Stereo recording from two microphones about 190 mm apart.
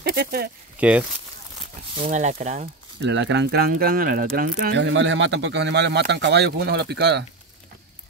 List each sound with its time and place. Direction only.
0.0 s speech: 55° right (ahead or behind)
0.7 s speech: 5° right (ahead or behind)
2.0 s speech: 35° right (ahead or behind)
3.0 s speech: 70° right (ahead or behind); by 4.7 s 50° right (ahead or behind)
4.7 s speech: 70° right (ahead or behind)